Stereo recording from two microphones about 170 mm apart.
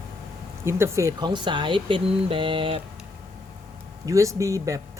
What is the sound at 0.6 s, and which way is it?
Speech, 15° right (ahead or behind).